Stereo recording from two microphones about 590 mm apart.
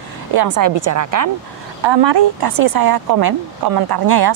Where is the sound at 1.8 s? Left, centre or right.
Right.